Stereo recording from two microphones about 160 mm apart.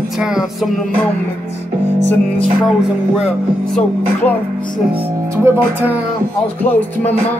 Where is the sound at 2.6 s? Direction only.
5° right (ahead or behind).